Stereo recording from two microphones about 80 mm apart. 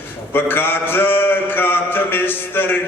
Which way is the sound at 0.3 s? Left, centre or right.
Left.